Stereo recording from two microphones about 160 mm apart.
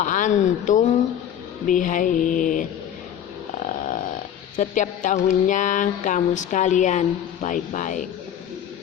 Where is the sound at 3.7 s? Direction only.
55° left (ahead or behind).